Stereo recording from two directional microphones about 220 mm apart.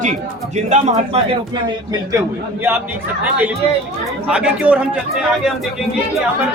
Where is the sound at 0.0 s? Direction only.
30° right (ahead or behind).